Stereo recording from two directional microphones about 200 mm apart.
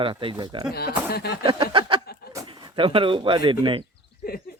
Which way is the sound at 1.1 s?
55° left (ahead or behind).